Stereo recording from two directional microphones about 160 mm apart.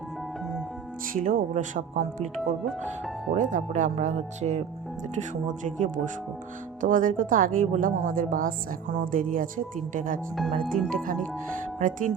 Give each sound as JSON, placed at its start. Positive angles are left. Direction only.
{"t": 1.1, "sound": "speech", "side_deg": -55}
{"t": 3.3, "sound": "a woman's voice", "side_deg": -55}
{"t": 10.3, "sound": "speech", "side_deg": 0}
{"t": 11.8, "sound": "speech", "side_deg": -55}